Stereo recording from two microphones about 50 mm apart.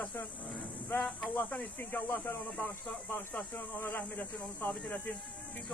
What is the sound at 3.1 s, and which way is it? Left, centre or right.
Speech, left.